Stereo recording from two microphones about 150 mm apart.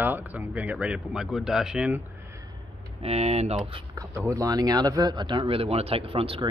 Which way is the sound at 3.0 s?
45° right (ahead or behind).